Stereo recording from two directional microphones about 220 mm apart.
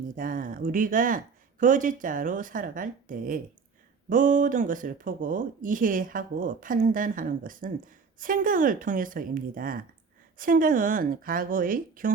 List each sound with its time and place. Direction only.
0.2 s speech: 40° right (ahead or behind)